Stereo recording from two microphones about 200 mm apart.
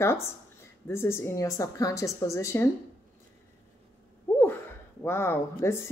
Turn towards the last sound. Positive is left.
turn(degrees=10)  # may be behind; listen again after turning